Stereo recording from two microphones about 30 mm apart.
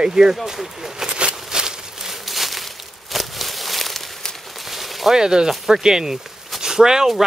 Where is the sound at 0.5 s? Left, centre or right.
Centre.